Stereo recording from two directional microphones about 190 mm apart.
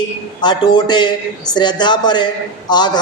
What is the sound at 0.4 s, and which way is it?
A man's voice, 20° left (ahead or behind).